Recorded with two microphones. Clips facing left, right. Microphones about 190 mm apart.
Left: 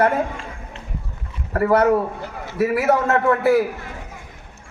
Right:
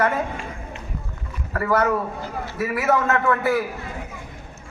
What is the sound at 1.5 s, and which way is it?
A man's voice, 35° left (ahead or behind).